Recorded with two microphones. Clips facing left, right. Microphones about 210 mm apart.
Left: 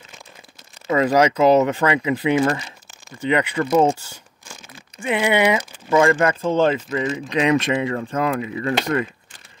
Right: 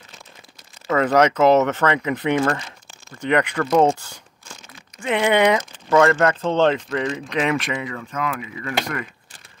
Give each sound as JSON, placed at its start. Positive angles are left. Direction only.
{"t": 0.8, "sound": "speech", "side_deg": 10}
{"t": 5.0, "sound": "speech", "side_deg": 10}
{"t": 7.4, "sound": "speech", "side_deg": 25}